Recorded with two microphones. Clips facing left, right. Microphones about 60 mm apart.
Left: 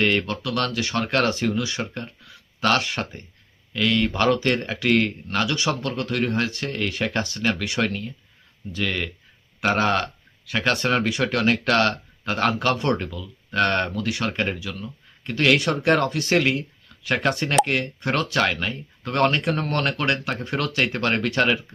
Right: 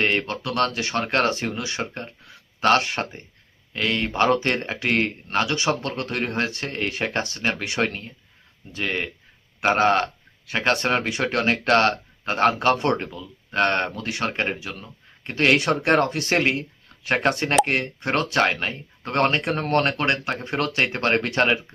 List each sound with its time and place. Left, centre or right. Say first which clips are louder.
0.0 s a man's voice: left 1 dB; right
1.8 s speech: right 1 dB; centre
2.6 s a man's voice: right 2 dB; right
5.6 s a man's voice: right 1 dB; right
16.0 s speech: left 1 dB; right
16.3 s a man's voice: left 1 dB; right
17.6 s speech: even; centre
18.0 s a man's voice: right 2 dB; right